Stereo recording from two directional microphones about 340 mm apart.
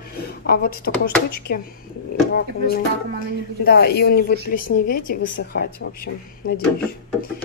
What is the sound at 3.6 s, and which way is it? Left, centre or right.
A woman's voice, left.